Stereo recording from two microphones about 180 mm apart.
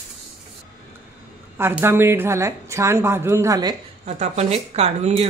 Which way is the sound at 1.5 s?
15° right (ahead or behind).